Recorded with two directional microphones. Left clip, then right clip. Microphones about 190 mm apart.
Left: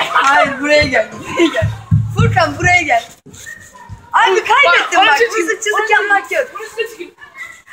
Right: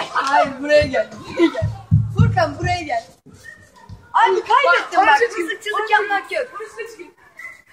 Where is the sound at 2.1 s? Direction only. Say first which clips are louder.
Left 6 dB; 5° right (ahead or behind).